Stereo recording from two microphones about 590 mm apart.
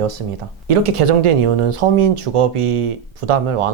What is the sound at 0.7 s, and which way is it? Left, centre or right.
Speech, right.